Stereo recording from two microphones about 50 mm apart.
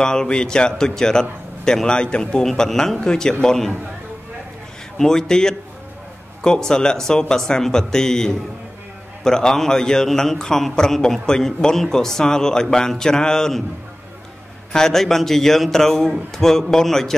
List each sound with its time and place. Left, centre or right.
0.0 s a man's voice: centre
4.9 s a man's voice: centre
14.7 s a man's voice: centre